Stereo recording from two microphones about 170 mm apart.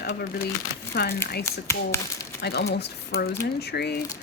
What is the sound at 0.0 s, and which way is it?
Speech, 70° left (ahead or behind).